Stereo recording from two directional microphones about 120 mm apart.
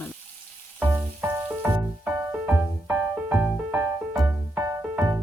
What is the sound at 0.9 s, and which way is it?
Music, 15° right (ahead or behind).